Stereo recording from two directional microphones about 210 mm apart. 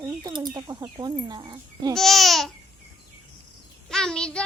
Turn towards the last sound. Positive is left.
turn(degrees=5)  # may be behind; listen again after turning